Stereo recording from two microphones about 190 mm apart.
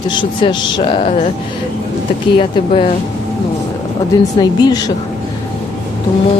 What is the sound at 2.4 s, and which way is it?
Speech, 30° left (ahead or behind).